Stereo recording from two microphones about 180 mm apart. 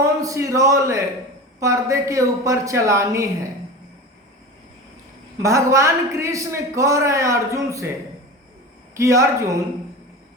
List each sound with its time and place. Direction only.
0.0 s a man's voice: 20° right (ahead or behind)
5.4 s a man's voice: 15° right (ahead or behind)
9.0 s a man's voice: 15° right (ahead or behind)